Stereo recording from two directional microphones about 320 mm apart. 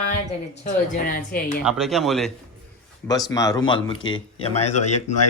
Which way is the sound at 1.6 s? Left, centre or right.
Centre.